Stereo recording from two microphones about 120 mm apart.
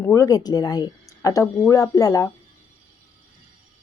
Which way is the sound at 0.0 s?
25° left (ahead or behind).